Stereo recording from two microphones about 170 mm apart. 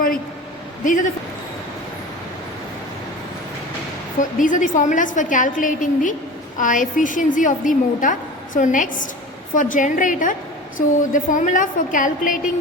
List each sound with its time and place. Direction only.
4.2 s a woman's voice: 50° left (ahead or behind)